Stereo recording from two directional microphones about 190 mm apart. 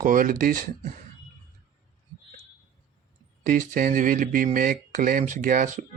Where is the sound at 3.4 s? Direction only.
45° right (ahead or behind).